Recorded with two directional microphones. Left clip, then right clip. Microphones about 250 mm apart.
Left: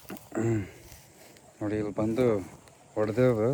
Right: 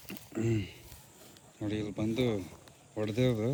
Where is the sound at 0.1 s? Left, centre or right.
Centre.